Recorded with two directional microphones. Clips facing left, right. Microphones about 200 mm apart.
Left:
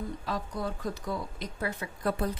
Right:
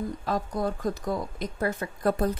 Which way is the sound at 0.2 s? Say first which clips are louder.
Right 7 dB; 45° right (ahead or behind).